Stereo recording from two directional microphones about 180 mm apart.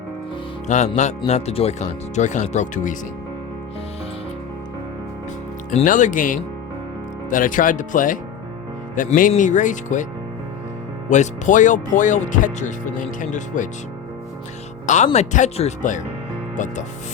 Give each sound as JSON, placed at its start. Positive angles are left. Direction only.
{"t": 0.7, "sound": "speech", "side_deg": 40}
{"t": 5.7, "sound": "speech", "side_deg": 45}
{"t": 11.1, "sound": "speech", "side_deg": 45}
{"t": 14.8, "sound": "speech", "side_deg": 40}